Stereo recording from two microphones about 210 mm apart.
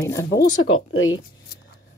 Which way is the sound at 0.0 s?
15° left (ahead or behind).